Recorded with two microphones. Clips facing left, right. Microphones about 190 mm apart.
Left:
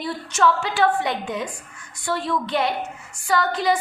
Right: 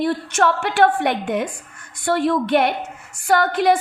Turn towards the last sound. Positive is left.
turn(degrees=-55)  # may be behind; listen again after turning